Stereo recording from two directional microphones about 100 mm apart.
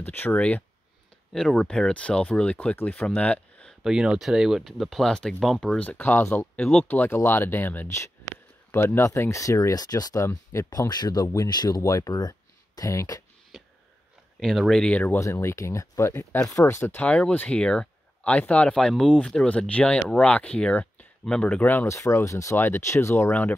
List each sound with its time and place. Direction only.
0.0 s speech: 20° left (ahead or behind)
3.2 s a sound: 15° left (ahead or behind)
3.8 s speech: 10° right (ahead or behind); by 6.6 s 20° left (ahead or behind)
6.6 s speech: 5° left (ahead or behind)
6.9 s speech: 20° left (ahead or behind); by 10.2 s 40° left (ahead or behind)
10.2 s speech: 25° left (ahead or behind)
10.7 s speech: 40° left (ahead or behind)
14.4 s speech: centre (ahead or behind)
15.1 s speech: 30° left (ahead or behind)
17.0 s speech: 15° left (ahead or behind)
21.8 s speech: 30° left (ahead or behind)